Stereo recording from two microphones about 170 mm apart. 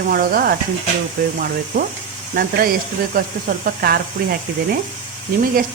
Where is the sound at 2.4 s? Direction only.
50° right (ahead or behind).